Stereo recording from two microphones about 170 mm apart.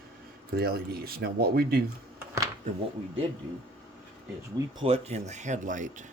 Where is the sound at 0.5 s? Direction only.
65° right (ahead or behind).